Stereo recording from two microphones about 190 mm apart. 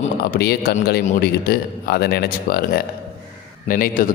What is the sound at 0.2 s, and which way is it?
A man's voice, 55° left (ahead or behind).